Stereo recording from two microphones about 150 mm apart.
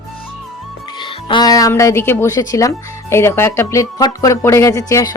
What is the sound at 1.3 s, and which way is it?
Speech, 25° left (ahead or behind).